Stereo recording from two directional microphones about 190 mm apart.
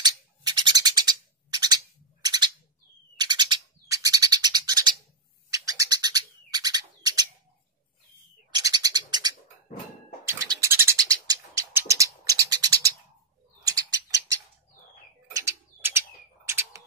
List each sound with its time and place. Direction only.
0.0 s a sound: 20° right (ahead or behind)
2.2 s bird: 20° right (ahead or behind)
8.5 s bird: 20° right (ahead or behind)
15.3 s bird: 15° right (ahead or behind)